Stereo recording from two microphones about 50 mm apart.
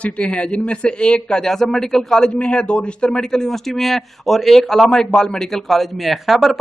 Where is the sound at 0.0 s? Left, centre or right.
Left.